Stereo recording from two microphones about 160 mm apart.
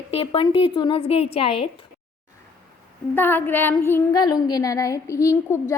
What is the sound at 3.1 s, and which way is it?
Child singing, 10° left (ahead or behind).